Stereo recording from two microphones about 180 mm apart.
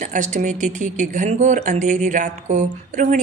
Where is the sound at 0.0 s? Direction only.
45° right (ahead or behind).